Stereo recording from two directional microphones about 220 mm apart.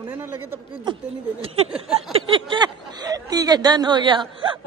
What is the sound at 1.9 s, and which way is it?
Speech, 25° right (ahead or behind).